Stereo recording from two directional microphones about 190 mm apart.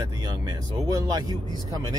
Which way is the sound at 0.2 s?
20° right (ahead or behind).